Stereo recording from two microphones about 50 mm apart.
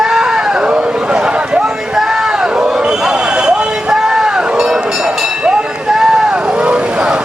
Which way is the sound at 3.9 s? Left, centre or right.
Centre.